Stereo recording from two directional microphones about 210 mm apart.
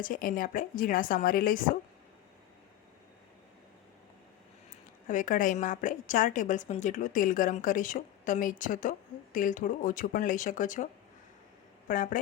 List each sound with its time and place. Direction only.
0.0 s a woman's voice: 40° left (ahead or behind)
5.0 s a woman's voice: 40° left (ahead or behind)
11.9 s a woman's voice: 40° left (ahead or behind)